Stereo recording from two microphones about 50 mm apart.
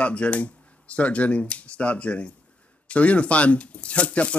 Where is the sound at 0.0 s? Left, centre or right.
Left.